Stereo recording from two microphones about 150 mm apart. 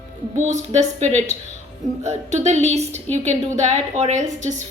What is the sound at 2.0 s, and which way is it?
A woman's voice, 50° right (ahead or behind).